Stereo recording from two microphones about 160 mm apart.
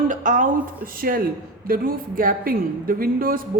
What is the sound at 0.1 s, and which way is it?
A woman's voice, 55° right (ahead or behind).